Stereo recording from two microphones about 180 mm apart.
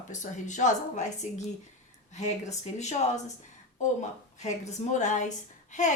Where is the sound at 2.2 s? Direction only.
40° left (ahead or behind).